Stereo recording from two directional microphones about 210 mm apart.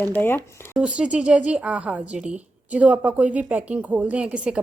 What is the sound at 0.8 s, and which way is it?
Speech, 5° right (ahead or behind).